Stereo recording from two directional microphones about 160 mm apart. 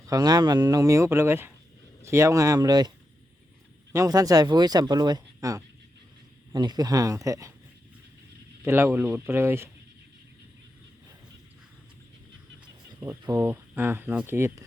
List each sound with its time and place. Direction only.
0.0 s speech: 20° right (ahead or behind)
3.9 s speech: 20° right (ahead or behind)
8.6 s speech: 15° right (ahead or behind)
13.0 s speech: 15° right (ahead or behind)